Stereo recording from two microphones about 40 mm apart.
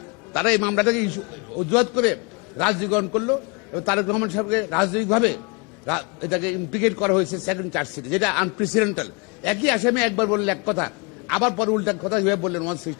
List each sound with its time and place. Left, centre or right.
0.3 s a man's voice: centre